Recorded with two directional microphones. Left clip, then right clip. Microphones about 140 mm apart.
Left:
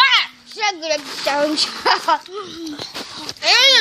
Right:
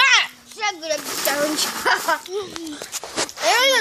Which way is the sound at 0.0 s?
45° right (ahead or behind).